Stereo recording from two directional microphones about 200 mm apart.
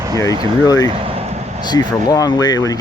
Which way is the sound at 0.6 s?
20° left (ahead or behind).